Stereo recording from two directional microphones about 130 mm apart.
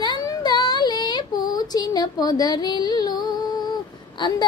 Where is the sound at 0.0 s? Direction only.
35° left (ahead or behind).